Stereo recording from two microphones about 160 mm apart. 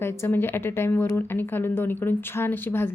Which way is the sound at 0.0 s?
15° left (ahead or behind).